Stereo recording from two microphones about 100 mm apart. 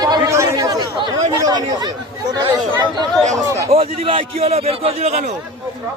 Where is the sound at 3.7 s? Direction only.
70° right (ahead or behind); by 5.2 s 90° right.